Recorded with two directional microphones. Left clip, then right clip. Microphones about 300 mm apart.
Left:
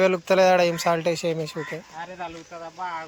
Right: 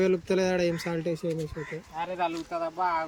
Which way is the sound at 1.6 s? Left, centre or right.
Left.